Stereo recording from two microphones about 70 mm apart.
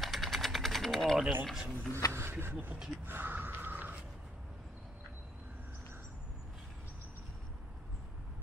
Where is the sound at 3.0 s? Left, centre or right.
Right.